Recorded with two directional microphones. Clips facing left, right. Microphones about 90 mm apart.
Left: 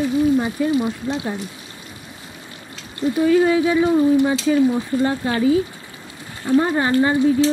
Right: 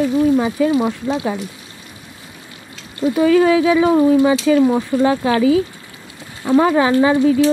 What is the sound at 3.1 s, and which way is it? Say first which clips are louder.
Speech: right 3 dB; 90° right.